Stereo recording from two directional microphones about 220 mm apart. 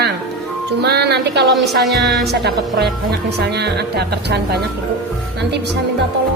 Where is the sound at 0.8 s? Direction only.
50° right (ahead or behind).